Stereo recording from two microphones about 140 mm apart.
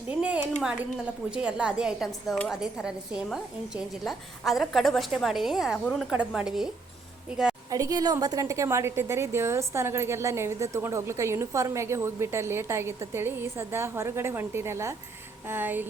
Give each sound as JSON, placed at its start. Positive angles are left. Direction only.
{"t": 0.1, "sound": "a woman's voice", "side_deg": -10}
{"t": 7.7, "sound": "a woman's voice", "side_deg": -25}